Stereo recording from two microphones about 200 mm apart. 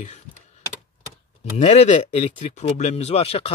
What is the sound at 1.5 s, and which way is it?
Speech, 35° left (ahead or behind).